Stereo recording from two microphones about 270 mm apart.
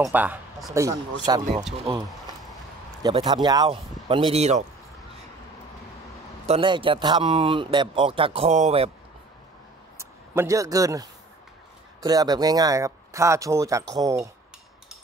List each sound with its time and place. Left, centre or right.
0.0 s speech: centre
3.0 s speech: centre
6.4 s speech: centre
9.9 s a man's voice: centre